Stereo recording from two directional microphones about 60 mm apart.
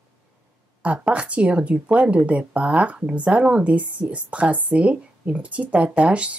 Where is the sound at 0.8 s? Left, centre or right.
Right.